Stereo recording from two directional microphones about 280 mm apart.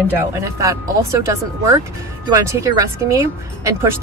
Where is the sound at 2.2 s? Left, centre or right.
Centre.